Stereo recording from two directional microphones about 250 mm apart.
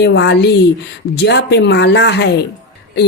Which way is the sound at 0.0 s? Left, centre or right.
Left.